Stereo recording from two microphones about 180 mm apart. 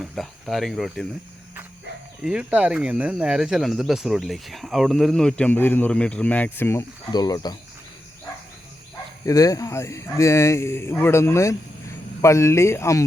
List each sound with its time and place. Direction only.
0.0 s speech: centre (ahead or behind)
2.2 s speech: 5° right (ahead or behind); by 7.5 s 20° left (ahead or behind)
9.2 s a man's voice: 20° left (ahead or behind)